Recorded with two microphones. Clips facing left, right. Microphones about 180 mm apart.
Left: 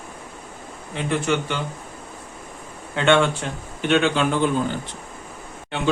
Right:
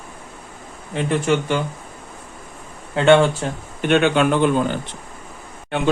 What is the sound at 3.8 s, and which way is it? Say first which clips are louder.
Speech: right 3 dB; 55° right (ahead or behind).